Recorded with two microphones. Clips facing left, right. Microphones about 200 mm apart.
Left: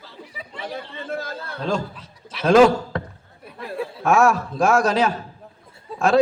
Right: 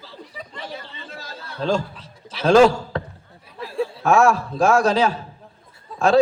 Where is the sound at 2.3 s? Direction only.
30° right (ahead or behind).